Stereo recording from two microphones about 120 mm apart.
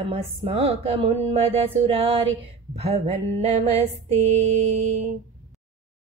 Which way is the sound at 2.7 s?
60° right (ahead or behind).